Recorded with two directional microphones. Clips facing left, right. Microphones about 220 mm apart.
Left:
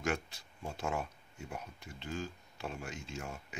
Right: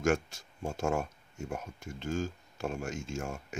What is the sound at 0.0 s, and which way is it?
Speech, 45° right (ahead or behind).